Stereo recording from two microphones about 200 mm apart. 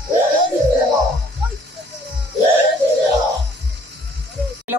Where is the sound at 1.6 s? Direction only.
60° right (ahead or behind).